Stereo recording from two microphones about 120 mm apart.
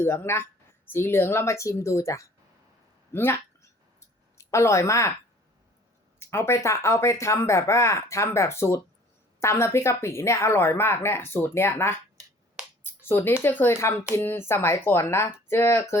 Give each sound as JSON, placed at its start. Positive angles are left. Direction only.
{"t": 0.0, "sound": "speech", "side_deg": 20}
{"t": 3.1, "sound": "a sound", "side_deg": 20}
{"t": 4.4, "sound": "speech", "side_deg": 25}
{"t": 6.1, "sound": "speech", "side_deg": 20}
{"t": 12.8, "sound": "a sound", "side_deg": 20}
{"t": 13.4, "sound": "speech", "side_deg": 15}